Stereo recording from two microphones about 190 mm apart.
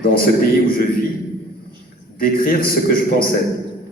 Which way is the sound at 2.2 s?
50° left (ahead or behind).